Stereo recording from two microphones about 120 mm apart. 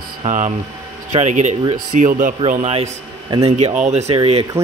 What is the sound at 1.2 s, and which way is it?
Speech, 85° right.